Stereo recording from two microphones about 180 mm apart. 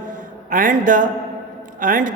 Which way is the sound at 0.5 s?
45° right (ahead or behind).